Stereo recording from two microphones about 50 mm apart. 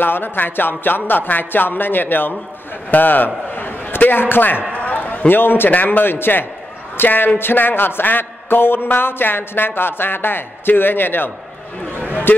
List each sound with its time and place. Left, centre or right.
0.0 s a man's voice: left
3.5 s a sound: left
4.7 s a man's voice: left